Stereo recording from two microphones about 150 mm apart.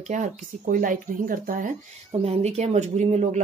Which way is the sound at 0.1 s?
60° right (ahead or behind).